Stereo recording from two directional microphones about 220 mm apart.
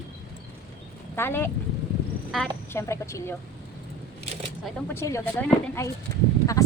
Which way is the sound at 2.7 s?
10° left (ahead or behind).